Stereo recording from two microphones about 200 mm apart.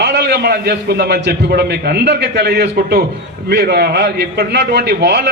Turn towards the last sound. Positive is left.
turn(degrees=-60)  # may be behind; listen again after turning